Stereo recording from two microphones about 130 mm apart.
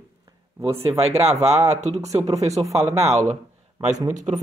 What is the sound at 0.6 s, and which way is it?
Speech, 50° right (ahead or behind).